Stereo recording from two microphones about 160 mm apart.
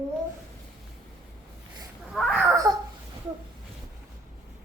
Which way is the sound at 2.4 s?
20° right (ahead or behind).